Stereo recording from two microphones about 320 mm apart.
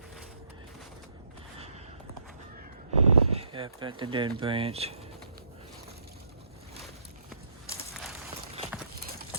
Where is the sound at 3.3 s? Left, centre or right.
Centre.